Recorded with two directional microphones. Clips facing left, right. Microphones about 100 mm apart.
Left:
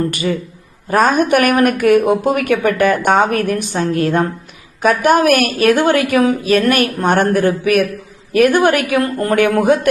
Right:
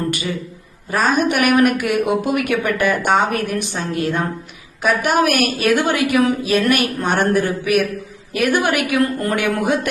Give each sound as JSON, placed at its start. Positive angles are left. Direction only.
{"t": 0.1, "sound": "speech", "side_deg": 45}